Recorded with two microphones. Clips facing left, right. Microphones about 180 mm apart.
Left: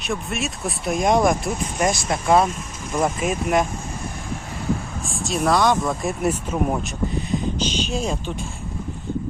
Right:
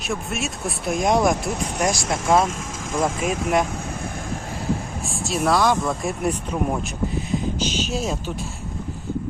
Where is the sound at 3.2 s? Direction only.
Centre (ahead or behind).